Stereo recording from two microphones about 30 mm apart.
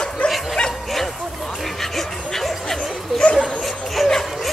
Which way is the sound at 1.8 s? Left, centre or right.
Centre.